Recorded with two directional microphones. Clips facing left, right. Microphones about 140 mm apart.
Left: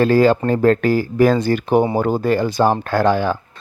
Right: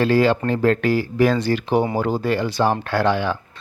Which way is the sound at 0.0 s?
45° left (ahead or behind).